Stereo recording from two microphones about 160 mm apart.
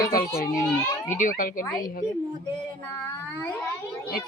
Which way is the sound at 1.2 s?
60° left (ahead or behind).